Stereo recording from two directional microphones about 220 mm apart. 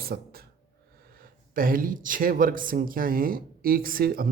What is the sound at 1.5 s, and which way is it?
Speech, 40° right (ahead or behind).